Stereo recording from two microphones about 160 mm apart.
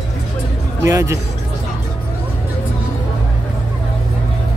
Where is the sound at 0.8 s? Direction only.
20° right (ahead or behind).